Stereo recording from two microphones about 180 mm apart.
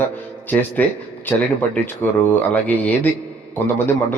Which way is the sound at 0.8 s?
10° left (ahead or behind).